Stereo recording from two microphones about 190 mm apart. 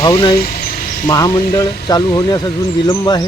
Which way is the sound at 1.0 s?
20° left (ahead or behind).